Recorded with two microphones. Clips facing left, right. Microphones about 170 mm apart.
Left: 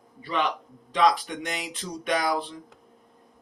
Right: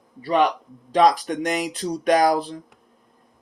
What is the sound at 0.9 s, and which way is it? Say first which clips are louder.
Speech: right 5 dB; 40° right (ahead or behind).